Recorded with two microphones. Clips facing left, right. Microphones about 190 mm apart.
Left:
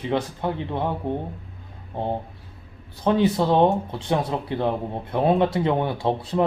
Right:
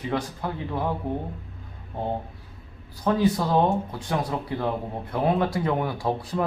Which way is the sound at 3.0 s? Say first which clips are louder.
Left 3 dB; 25° left (ahead or behind).